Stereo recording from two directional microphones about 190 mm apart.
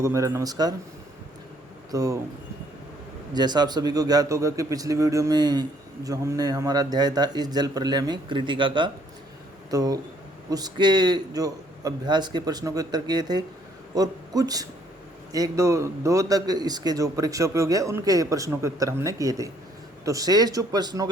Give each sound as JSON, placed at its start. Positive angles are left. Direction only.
{"t": 0.0, "sound": "a man's voice", "side_deg": -15}
{"t": 1.9, "sound": "speech", "side_deg": -20}
{"t": 3.3, "sound": "a man's voice", "side_deg": -20}